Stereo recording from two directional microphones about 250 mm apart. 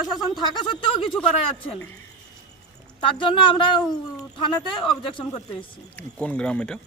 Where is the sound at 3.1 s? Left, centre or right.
Centre.